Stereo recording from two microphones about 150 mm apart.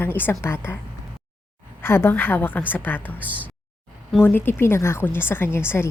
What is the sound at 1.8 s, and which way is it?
A woman's voice, 15° left (ahead or behind).